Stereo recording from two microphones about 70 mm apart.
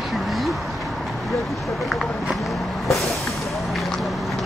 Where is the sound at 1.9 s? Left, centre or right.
Centre.